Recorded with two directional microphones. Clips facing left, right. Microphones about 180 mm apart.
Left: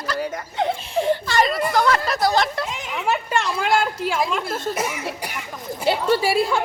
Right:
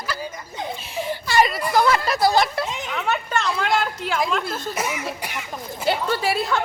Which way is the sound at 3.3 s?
10° left (ahead or behind).